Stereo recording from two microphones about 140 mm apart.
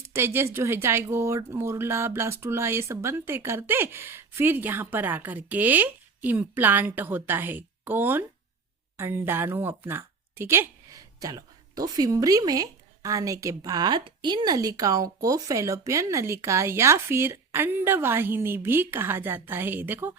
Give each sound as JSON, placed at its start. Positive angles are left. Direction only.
{"t": 0.1, "sound": "a woman's voice", "side_deg": -15}